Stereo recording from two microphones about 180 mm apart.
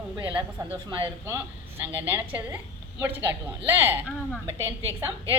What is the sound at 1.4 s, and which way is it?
Music, 10° right (ahead or behind).